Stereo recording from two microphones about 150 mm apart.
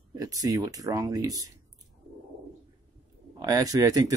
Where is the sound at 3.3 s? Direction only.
25° right (ahead or behind).